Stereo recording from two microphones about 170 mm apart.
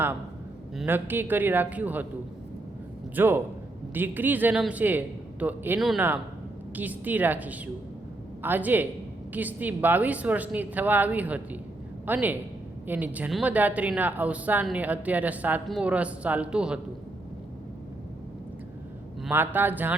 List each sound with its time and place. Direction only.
0.9 s speech: 10° right (ahead or behind)
3.2 s speech: 10° right (ahead or behind)
19.3 s speech: 10° right (ahead or behind)